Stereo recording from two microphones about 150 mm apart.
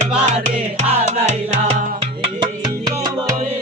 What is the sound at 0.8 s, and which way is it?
Music, 45° right (ahead or behind).